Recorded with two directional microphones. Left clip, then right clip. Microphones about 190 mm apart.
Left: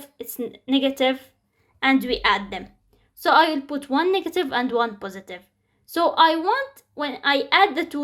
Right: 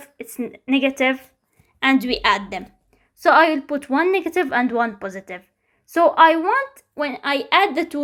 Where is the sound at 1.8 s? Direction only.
30° right (ahead or behind).